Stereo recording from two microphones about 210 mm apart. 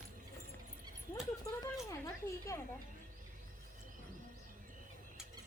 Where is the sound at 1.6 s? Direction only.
15° left (ahead or behind).